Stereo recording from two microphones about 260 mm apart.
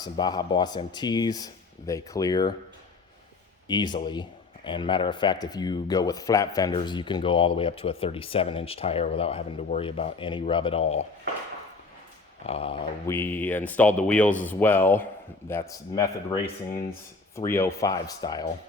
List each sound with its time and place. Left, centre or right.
0.0 s speech: centre
3.7 s speech: centre
12.5 s speech: left
13.1 s speech: centre